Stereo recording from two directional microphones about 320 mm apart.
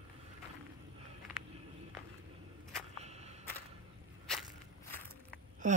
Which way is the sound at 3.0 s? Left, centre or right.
Centre.